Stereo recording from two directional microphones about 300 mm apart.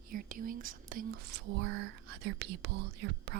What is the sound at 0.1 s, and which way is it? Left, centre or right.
Speech, right.